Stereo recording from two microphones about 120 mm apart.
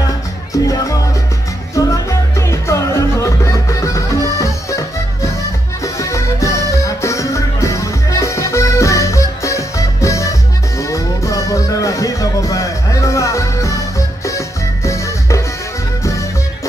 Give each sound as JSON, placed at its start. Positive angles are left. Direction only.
{"t": 0.0, "sound": "music", "side_deg": 30}